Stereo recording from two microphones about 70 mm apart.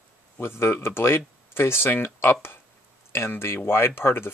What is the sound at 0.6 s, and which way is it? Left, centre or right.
Speech, left.